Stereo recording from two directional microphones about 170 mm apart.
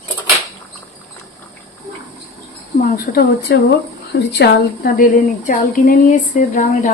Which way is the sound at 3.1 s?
70° left (ahead or behind).